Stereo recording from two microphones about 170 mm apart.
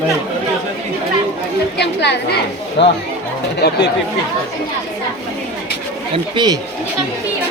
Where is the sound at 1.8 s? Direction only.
85° left.